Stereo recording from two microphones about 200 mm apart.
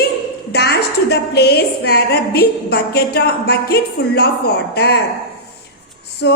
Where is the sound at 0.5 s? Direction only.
55° left (ahead or behind).